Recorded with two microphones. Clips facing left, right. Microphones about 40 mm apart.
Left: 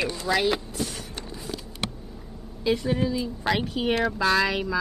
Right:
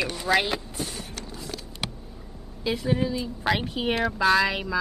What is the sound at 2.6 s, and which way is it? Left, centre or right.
Speech, centre.